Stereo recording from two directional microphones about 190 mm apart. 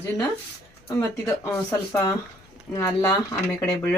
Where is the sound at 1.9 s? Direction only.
15° left (ahead or behind).